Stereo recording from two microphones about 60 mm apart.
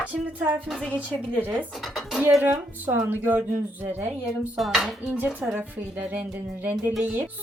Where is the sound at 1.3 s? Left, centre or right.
Right.